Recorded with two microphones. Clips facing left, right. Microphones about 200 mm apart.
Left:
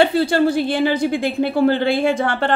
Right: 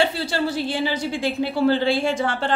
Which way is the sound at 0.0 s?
55° left (ahead or behind).